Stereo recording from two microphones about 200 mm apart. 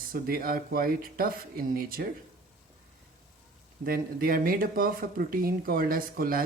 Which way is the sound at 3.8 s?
45° right (ahead or behind).